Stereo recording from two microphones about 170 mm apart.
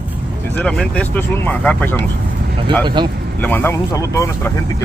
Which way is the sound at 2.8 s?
25° right (ahead or behind).